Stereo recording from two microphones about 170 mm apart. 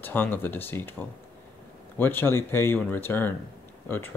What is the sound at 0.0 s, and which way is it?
Speech, 10° left (ahead or behind).